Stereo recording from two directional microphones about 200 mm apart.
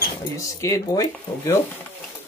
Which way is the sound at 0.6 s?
15° left (ahead or behind).